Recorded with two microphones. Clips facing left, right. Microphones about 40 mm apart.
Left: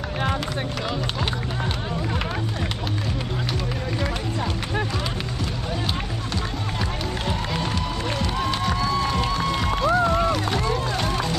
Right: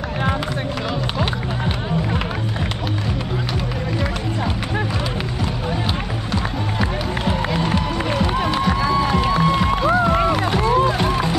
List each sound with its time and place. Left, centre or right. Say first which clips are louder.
6.8 s run: right 6 dB; centre
8.5 s music: right 6 dB; centre